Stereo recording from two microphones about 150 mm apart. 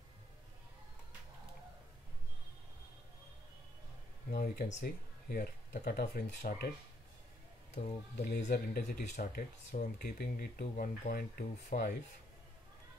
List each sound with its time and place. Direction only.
4.3 s speech: 85° left
4.6 s speech: 55° left (ahead or behind)
5.3 s speech: 85° left
7.7 s speech: 60° left (ahead or behind); by 8.8 s 90° left
9.1 s speech: 60° left (ahead or behind)